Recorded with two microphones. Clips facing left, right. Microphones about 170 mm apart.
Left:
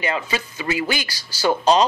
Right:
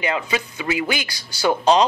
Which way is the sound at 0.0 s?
15° right (ahead or behind).